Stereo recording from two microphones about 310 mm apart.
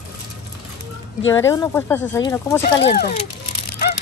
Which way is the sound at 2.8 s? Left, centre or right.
Left.